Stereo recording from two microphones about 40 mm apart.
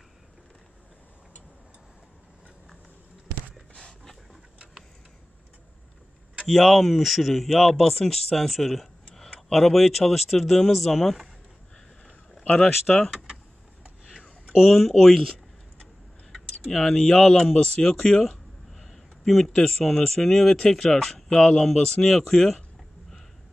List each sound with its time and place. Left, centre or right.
3.7 s dog: centre
6.4 s speech: centre
12.9 s speech: centre
14.7 s speech: centre
16.6 s speech: centre
17.0 s speech: centre
18.7 s a sound: centre
19.6 s speech: centre